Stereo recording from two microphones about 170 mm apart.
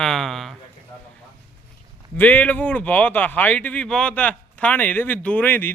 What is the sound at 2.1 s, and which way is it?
Speech, 10° left (ahead or behind).